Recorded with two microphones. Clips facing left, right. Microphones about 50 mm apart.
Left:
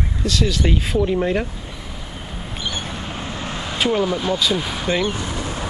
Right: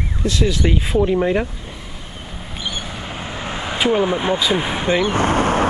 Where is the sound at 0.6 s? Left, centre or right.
Centre.